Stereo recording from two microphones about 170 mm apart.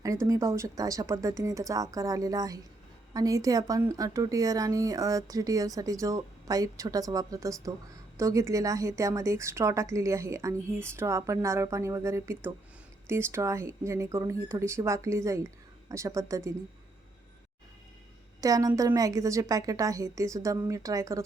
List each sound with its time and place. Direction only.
0.0 s a woman's voice: 20° right (ahead or behind)
18.3 s a woman's voice: 20° right (ahead or behind)